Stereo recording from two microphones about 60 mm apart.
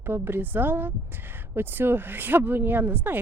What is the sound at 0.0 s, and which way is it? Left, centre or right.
Speech, right.